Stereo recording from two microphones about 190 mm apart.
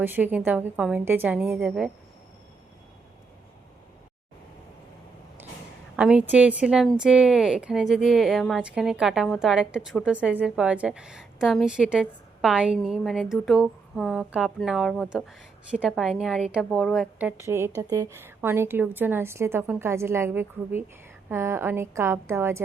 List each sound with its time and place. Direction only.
0.0 s a woman's voice: 10° right (ahead or behind)
6.0 s a woman's voice: 5° right (ahead or behind)